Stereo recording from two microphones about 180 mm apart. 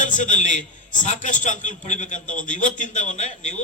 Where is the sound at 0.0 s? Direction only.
45° left (ahead or behind).